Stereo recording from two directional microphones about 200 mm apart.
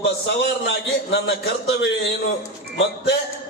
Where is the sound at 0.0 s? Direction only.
55° left (ahead or behind).